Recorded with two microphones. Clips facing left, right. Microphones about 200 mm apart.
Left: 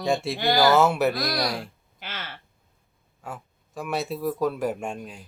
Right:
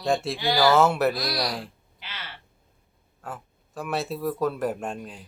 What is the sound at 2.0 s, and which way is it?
Crow, 50° left (ahead or behind).